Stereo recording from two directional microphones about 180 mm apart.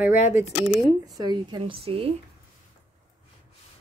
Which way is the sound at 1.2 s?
25° right (ahead or behind).